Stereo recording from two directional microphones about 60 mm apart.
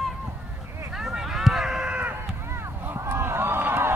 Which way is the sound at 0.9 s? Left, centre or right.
Centre.